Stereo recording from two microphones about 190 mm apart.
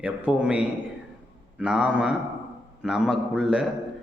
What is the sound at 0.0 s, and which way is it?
A man's voice, 5° right (ahead or behind).